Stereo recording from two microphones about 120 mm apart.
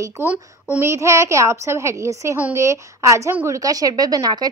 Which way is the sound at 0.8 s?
25° right (ahead or behind).